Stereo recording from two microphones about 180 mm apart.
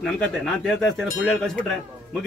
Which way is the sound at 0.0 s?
5° left (ahead or behind).